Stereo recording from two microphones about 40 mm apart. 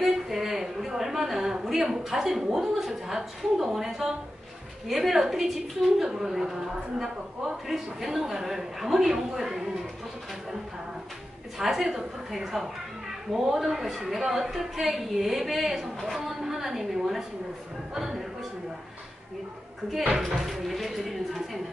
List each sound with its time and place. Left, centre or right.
0.0 s a sound: centre
2.6 s a woman's voice: centre
7.7 s a woman's voice: centre
11.5 s a woman's voice: centre
20.2 s speech: centre